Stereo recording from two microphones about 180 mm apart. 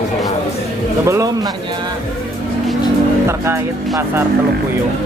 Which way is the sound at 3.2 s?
15° right (ahead or behind).